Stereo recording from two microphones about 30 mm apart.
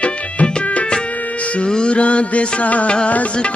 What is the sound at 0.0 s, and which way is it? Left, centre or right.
Music, left.